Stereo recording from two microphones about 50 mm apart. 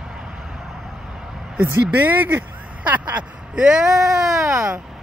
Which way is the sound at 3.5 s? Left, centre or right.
Centre.